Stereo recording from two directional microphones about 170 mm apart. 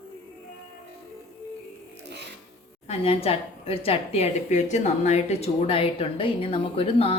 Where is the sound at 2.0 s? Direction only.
85° right.